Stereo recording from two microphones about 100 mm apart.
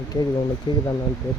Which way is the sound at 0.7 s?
55° left (ahead or behind).